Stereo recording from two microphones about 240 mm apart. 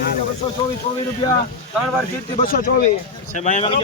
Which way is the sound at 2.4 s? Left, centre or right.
Left.